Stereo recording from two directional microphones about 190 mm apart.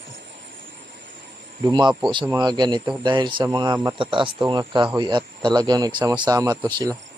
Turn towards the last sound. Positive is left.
turn(degrees=-20)  # may be behind; listen again after turning